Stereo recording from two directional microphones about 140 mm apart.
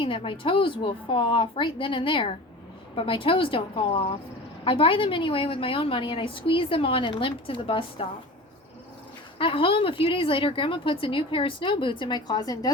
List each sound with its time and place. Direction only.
0.0 s a woman's voice: 40° left (ahead or behind)
9.4 s a woman's voice: 40° left (ahead or behind)